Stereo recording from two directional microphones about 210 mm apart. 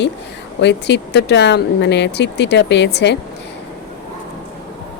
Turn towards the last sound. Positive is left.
turn(degrees=55)  # may be behind; listen again after turning